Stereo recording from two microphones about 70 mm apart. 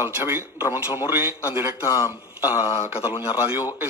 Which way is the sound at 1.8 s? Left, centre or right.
Left.